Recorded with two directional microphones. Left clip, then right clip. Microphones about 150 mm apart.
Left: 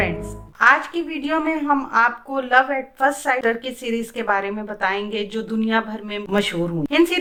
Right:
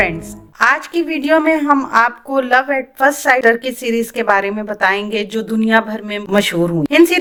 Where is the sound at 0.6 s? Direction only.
30° right (ahead or behind).